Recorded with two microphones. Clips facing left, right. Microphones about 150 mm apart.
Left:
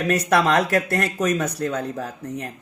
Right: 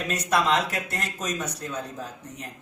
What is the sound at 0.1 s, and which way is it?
Speech, 65° left (ahead or behind).